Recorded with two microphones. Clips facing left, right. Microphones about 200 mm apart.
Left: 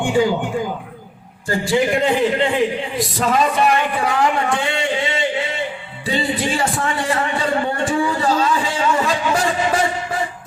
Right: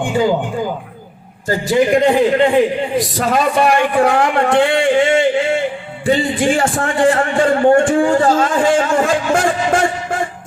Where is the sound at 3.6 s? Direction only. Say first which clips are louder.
Right 5 dB; 55° right (ahead or behind).